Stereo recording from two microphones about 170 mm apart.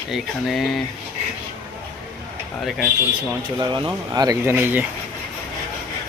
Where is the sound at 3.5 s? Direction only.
25° right (ahead or behind).